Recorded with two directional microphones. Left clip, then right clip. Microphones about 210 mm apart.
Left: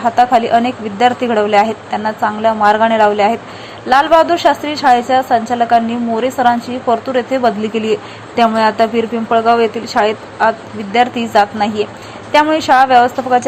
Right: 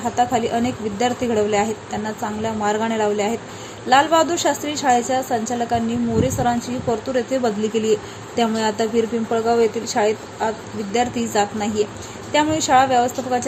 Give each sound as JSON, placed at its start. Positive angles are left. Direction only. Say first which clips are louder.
{"t": 0.2, "sound": "a woman's voice", "louder": "left 8 dB", "side_deg": 0}